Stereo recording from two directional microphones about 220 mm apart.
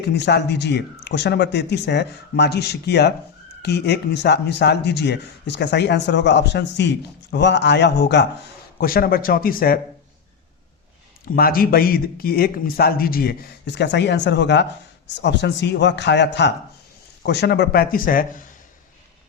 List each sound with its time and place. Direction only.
0.0 s speech: 50° left (ahead or behind)
11.3 s speech: 40° left (ahead or behind)